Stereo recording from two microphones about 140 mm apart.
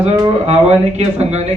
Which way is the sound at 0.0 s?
50° right (ahead or behind).